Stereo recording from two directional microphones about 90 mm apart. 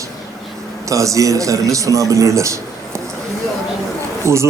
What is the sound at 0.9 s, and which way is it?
A man's voice, 35° right (ahead or behind).